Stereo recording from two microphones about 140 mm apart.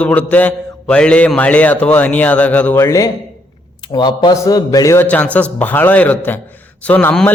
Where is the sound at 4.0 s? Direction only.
35° left (ahead or behind).